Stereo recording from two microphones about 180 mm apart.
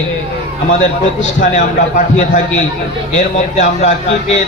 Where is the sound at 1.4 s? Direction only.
45° left (ahead or behind).